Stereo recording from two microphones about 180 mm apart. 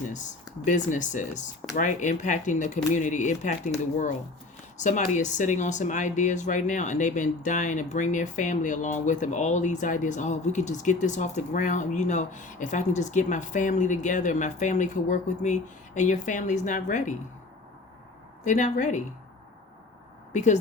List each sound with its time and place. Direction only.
0.1 s speech: 45° left (ahead or behind)
4.8 s speech: 45° left (ahead or behind)
18.4 s speech: 45° left (ahead or behind)
20.3 s speech: 40° left (ahead or behind)